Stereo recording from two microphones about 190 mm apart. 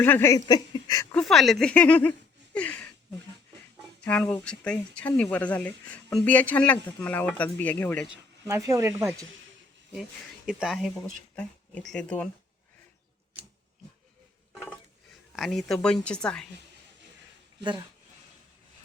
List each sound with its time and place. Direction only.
0.0 s speech: 10° left (ahead or behind)
1.1 s speech: centre (ahead or behind)
4.0 s speech: 5° left (ahead or behind)
8.1 s speech: 15° right (ahead or behind)
9.9 s speech: 5° right (ahead or behind)
15.4 s speech: centre (ahead or behind)
17.6 s speech: 25° right (ahead or behind)